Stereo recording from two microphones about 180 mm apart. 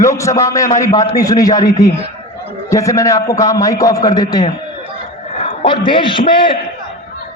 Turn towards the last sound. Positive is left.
turn(degrees=25)  # may be behind; listen again after turning